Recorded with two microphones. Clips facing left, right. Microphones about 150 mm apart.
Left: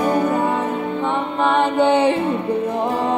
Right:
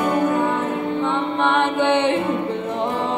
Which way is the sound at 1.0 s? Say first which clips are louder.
Left 1 dB; 10° left (ahead or behind).